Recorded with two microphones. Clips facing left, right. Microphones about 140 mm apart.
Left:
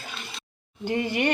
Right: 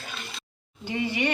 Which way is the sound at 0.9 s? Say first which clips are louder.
Left 2 dB; 55° left (ahead or behind).